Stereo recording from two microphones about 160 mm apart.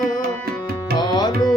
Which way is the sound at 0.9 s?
25° left (ahead or behind).